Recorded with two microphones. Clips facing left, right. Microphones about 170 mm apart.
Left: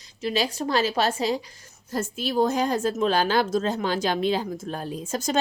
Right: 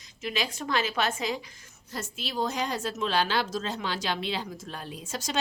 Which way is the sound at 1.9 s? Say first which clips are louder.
Left 9 dB; 50° left (ahead or behind).